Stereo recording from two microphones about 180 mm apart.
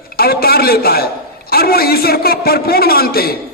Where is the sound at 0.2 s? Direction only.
55° left (ahead or behind).